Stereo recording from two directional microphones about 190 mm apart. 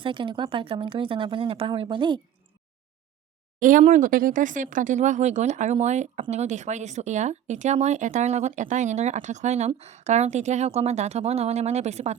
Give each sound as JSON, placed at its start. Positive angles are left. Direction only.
{"t": 0.0, "sound": "speech", "side_deg": -25}
{"t": 3.6, "sound": "speech", "side_deg": -45}